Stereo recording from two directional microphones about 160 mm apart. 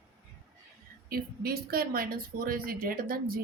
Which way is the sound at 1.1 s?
70° right (ahead or behind).